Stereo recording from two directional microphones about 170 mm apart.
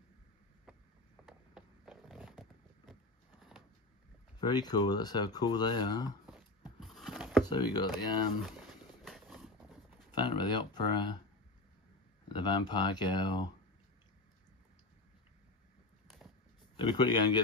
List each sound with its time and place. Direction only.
1.2 s a sound: centre (ahead or behind)
4.4 s speech: 25° left (ahead or behind)
6.2 s a sound: 5° right (ahead or behind)
7.4 s speech: 25° left (ahead or behind)
8.5 s horse: centre (ahead or behind)
10.1 s speech: 25° left (ahead or behind)
12.3 s speech: 25° left (ahead or behind)
16.8 s speech: 25° left (ahead or behind)